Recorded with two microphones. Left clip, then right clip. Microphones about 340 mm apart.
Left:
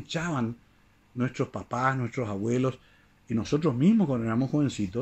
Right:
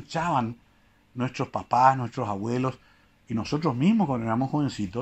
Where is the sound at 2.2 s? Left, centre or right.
Right.